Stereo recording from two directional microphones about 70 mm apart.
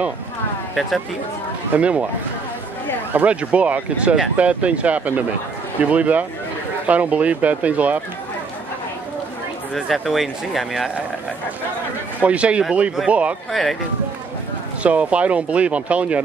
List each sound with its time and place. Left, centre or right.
0.7 s speech: centre
1.8 s speech: centre
3.1 s speech: right
9.8 s speech: centre
12.2 s speech: centre
13.5 s speech: centre
14.8 s speech: centre